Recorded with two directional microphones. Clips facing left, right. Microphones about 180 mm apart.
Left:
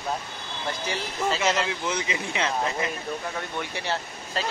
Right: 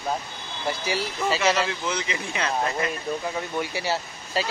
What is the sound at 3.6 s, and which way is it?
Speech, 5° right (ahead or behind).